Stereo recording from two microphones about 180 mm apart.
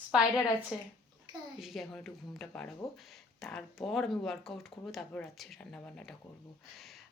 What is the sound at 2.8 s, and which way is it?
Speech, 15° left (ahead or behind).